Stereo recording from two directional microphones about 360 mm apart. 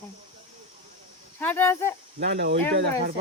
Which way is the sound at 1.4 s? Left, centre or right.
Centre.